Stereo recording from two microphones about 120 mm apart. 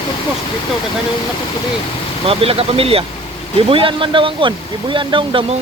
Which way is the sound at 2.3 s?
55° right (ahead or behind).